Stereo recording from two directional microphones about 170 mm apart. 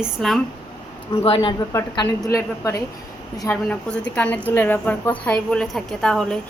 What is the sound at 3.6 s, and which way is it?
A woman's voice, 5° left (ahead or behind).